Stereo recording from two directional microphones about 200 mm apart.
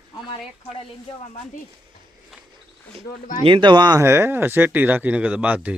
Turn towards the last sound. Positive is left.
turn(degrees=-5)  # may be behind; listen again after turning